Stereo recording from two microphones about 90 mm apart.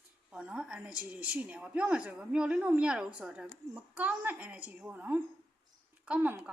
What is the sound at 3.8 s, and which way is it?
Speech, 20° right (ahead or behind).